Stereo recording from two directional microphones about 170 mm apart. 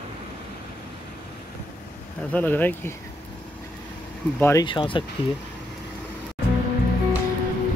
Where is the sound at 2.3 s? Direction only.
10° left (ahead or behind).